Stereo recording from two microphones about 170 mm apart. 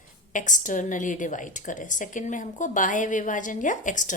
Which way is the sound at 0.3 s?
50° left (ahead or behind).